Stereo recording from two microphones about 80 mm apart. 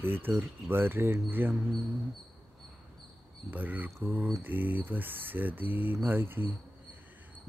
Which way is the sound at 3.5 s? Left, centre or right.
Right.